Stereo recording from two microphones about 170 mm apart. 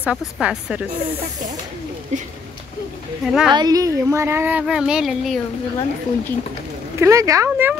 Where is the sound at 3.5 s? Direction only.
25° right (ahead or behind); by 5.4 s centre (ahead or behind).